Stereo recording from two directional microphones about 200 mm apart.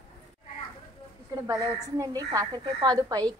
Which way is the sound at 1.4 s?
15° right (ahead or behind).